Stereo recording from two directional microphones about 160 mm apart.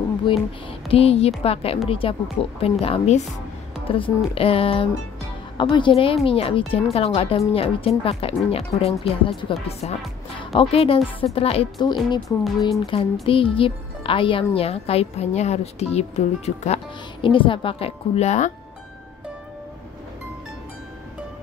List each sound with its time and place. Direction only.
0.8 s speech: 40° left (ahead or behind)